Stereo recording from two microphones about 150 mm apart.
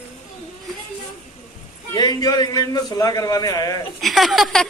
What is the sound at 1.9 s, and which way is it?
A man's voice, 25° left (ahead or behind).